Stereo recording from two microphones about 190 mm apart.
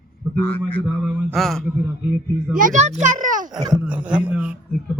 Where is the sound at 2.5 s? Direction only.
40° right (ahead or behind).